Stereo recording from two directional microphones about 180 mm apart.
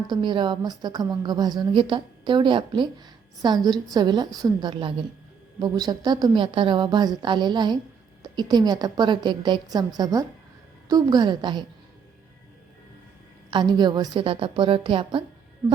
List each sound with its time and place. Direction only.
0.1 s a woman's voice: 25° right (ahead or behind)
13.5 s a woman's voice: 25° right (ahead or behind)